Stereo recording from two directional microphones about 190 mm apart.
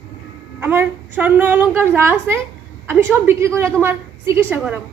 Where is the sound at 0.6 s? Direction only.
10° right (ahead or behind).